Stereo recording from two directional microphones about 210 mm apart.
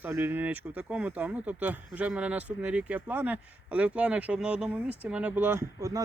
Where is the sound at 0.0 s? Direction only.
10° right (ahead or behind).